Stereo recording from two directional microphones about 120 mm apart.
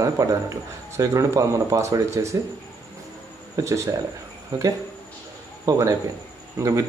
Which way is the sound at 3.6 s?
25° right (ahead or behind).